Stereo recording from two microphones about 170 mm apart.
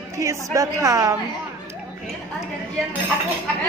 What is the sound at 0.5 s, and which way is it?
Speech, 20° right (ahead or behind).